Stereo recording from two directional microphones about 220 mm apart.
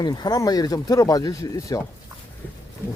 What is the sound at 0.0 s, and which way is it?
Speech, 20° left (ahead or behind).